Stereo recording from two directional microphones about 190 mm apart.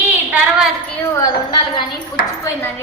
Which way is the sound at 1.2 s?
25° left (ahead or behind).